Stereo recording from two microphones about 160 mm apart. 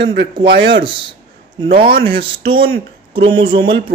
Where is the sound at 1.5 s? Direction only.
30° right (ahead or behind).